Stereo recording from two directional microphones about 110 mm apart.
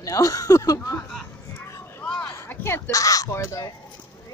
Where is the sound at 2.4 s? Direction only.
20° left (ahead or behind).